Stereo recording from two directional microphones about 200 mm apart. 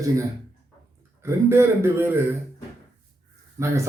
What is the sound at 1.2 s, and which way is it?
A man's voice, 15° right (ahead or behind).